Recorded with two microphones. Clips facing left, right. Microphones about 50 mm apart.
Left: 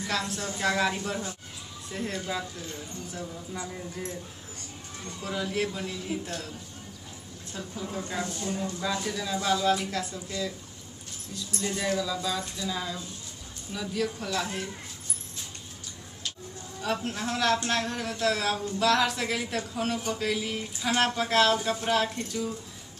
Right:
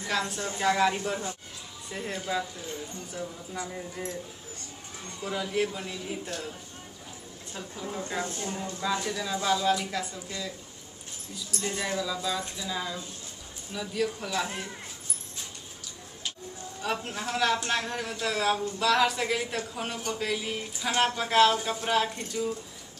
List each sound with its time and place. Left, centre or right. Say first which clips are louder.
0.6 s speech: right 2 dB; centre
3.5 s speech: right 1 dB; centre
5.2 s speech: right 1 dB; centre
7.5 s speech: left 1 dB; centre
8.2 s speech: left 3 dB; right
8.8 s speech: right 3 dB; centre
11.3 s speech: left 1 dB; centre
16.8 s speech: left 2 dB; centre